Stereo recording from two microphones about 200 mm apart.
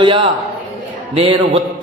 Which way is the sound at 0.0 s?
25° right (ahead or behind).